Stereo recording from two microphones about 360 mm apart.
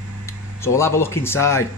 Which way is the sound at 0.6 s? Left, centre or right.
Centre.